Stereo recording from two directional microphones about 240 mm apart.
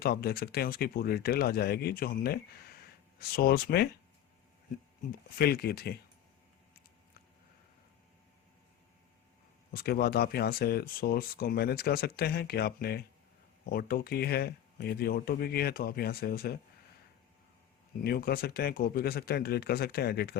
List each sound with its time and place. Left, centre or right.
0.0 s speech: left
5.4 s speech: left
9.7 s speech: left
18.0 s speech: left